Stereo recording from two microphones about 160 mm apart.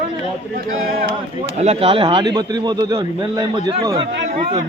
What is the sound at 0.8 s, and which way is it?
Speech, 65° right (ahead or behind).